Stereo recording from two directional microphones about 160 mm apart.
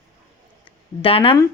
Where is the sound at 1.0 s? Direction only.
35° left (ahead or behind).